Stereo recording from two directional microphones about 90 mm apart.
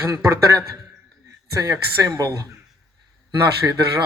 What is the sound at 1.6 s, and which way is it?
Speech, 45° right (ahead or behind).